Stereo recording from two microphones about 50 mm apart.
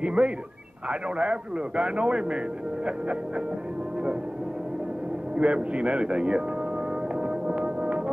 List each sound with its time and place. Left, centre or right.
0.0 s a man's voice: right
5.4 s a man's voice: right
7.2 s music: centre